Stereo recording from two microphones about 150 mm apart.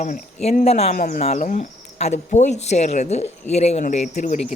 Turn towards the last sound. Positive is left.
turn(degrees=60)  # may be behind; listen again after turning